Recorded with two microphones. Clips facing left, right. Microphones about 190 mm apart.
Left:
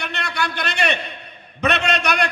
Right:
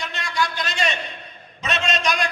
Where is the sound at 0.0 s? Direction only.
65° left (ahead or behind).